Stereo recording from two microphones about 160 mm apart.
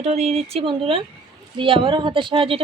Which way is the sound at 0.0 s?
45° right (ahead or behind).